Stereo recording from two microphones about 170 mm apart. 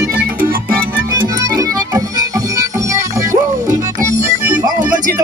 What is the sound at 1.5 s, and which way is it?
Music, 20° right (ahead or behind).